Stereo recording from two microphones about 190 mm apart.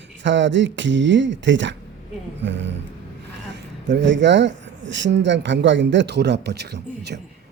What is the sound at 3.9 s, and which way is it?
Speech, 70° right (ahead or behind).